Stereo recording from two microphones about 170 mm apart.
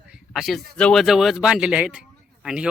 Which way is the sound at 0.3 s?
Centre (ahead or behind).